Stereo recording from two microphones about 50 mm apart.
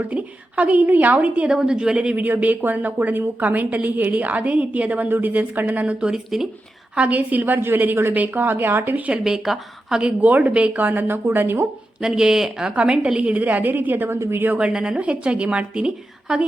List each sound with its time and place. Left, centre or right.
0.0 s a woman's voice: right
1.5 s a woman's voice: centre
2.2 s a woman's voice: right
5.8 s a woman's voice: right
6.1 s speech: centre
6.9 s a woman's voice: right
9.1 s a woman's voice: centre
10.0 s a woman's voice: right
10.8 s speech: right
12.0 s a woman's voice: centre
12.7 s a woman's voice: right
14.7 s a woman's voice: centre